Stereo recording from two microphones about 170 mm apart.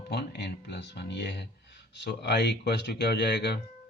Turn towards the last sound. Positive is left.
turn(degrees=80)